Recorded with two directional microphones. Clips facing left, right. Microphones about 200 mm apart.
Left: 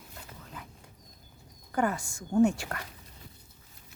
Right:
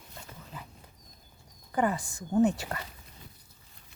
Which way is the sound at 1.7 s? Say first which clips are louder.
Right 1 dB; centre (ahead or behind).